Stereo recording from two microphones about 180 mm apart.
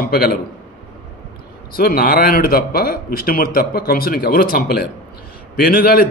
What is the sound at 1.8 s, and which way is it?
A man's voice, 55° left (ahead or behind).